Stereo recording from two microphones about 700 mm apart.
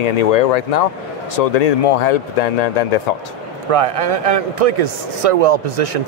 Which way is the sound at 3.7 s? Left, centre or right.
Right.